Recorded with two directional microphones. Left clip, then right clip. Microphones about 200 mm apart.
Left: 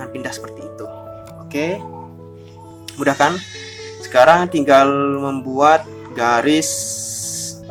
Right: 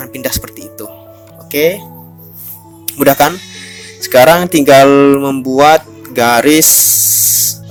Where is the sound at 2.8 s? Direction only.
35° right (ahead or behind).